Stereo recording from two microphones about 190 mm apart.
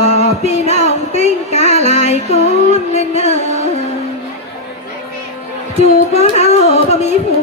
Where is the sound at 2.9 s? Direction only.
35° left (ahead or behind).